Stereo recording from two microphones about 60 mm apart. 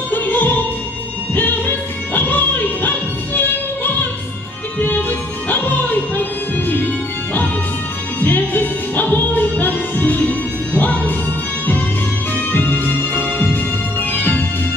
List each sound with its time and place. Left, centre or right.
0.1 s opera: left
2.1 s music: left
4.7 s music: left
8.2 s music: left
12.5 s music: left